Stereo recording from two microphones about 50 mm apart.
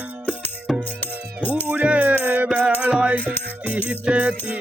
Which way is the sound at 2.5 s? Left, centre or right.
Right.